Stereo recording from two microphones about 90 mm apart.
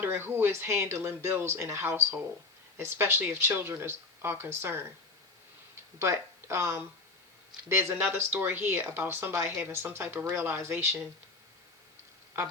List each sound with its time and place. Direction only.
0.0 s speech: 25° right (ahead or behind)
6.0 s speech: 30° right (ahead or behind)